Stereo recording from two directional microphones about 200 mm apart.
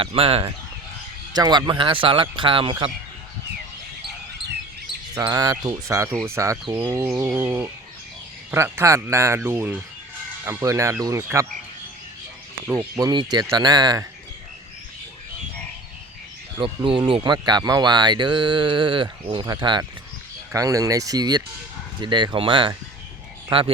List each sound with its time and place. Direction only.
0.0 s speech: 30° right (ahead or behind)
5.1 s speech: 20° right (ahead or behind)
12.6 s speech: 15° right (ahead or behind)
16.6 s speech: 25° right (ahead or behind)